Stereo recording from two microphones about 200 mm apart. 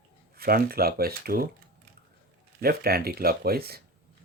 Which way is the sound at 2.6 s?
50° right (ahead or behind).